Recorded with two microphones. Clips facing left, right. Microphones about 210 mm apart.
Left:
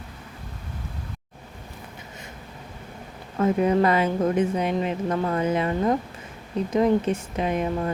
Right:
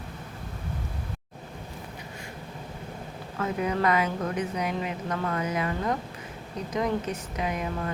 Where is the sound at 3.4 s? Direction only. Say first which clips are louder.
Left 8 dB; 30° left (ahead or behind).